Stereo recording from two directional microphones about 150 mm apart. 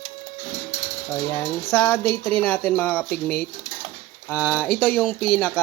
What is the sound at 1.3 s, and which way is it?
Speech, 15° left (ahead or behind).